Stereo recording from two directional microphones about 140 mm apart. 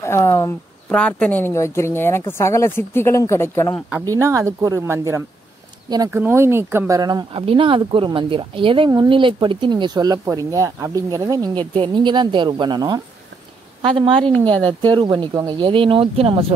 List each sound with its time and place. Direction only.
0.0 s speech: 20° left (ahead or behind)
0.9 s speech: 10° left (ahead or behind)
4.0 s speech: 25° right (ahead or behind)
7.0 s speech: 30° right (ahead or behind)
7.3 s speech: 40° right (ahead or behind)
15.6 s speech: 40° right (ahead or behind)